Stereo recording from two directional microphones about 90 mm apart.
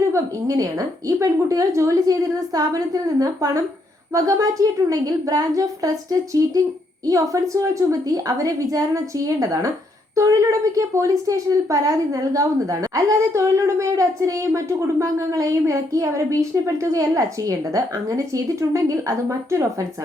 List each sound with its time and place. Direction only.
0.1 s a woman's voice: 40° right (ahead or behind)